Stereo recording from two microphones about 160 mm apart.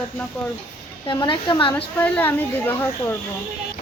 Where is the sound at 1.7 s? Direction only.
10° left (ahead or behind).